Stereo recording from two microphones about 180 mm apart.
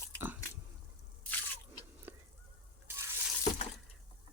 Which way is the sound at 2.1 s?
10° right (ahead or behind).